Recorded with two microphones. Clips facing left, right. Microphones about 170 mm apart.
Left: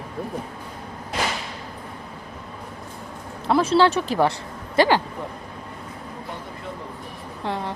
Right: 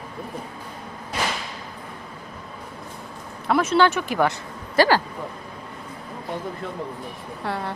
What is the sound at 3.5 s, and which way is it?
Speech, 30° left (ahead or behind).